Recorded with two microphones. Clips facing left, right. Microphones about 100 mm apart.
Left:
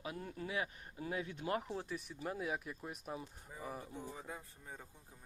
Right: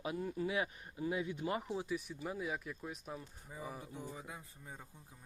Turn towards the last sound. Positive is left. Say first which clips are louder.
# even
turn(degrees=-5)  # may be behind; listen again after turning